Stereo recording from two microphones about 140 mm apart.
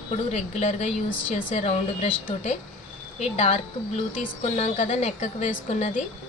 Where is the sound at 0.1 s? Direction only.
55° left (ahead or behind).